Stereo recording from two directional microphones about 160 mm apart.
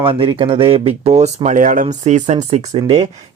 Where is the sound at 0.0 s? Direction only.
30° right (ahead or behind).